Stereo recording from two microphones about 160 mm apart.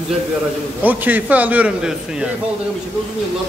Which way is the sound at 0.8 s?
10° right (ahead or behind).